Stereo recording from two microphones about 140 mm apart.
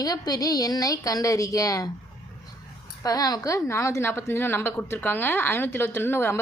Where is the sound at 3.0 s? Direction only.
25° left (ahead or behind).